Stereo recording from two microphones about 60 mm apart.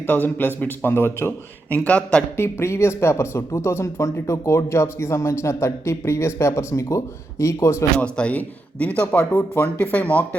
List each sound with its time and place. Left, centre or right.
0.1 s a man's voice: left
1.7 s a man's voice: left
2.3 s speech: left
7.9 s a man's voice: centre